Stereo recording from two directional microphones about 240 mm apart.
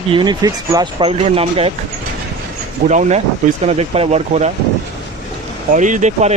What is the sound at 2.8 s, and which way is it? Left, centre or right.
Speech, right.